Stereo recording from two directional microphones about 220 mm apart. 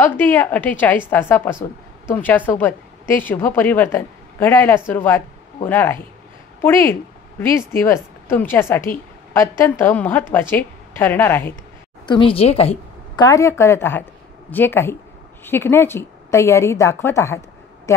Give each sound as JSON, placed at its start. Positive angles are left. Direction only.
{"t": 0.0, "sound": "a woman's voice", "side_deg": 10}
{"t": 12.1, "sound": "a woman's voice", "side_deg": 25}